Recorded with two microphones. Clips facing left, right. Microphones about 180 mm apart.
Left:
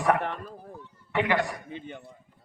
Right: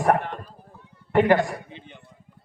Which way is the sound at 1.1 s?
45° right (ahead or behind).